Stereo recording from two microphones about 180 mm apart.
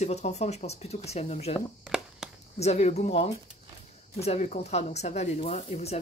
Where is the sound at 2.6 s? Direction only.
35° left (ahead or behind).